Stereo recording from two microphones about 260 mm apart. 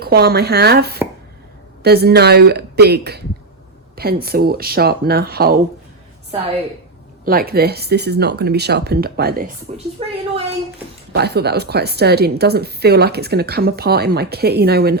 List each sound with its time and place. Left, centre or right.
0.0 s speech: right
7.3 s a woman's voice: right
11.1 s speech: right